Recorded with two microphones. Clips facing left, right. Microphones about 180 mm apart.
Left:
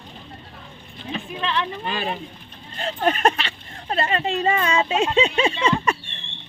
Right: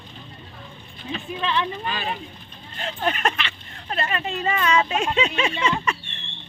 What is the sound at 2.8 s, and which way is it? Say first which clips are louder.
Speech: left 4 dB; 35° left (ahead or behind).